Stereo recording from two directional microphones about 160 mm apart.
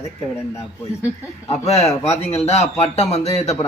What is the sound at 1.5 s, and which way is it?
A man's voice, 40° left (ahead or behind).